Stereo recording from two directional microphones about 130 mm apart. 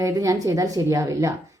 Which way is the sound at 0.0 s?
25° right (ahead or behind).